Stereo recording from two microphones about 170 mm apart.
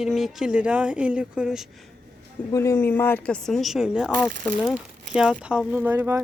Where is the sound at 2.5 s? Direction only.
15° left (ahead or behind).